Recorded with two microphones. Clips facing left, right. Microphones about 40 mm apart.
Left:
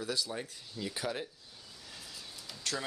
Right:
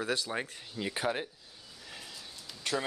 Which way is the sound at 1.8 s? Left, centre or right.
Right.